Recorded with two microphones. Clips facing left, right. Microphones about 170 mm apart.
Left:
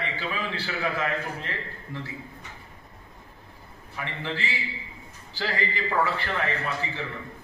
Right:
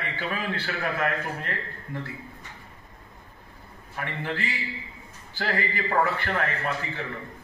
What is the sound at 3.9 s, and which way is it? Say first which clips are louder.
A man's voice: right 1 dB; 55° right (ahead or behind).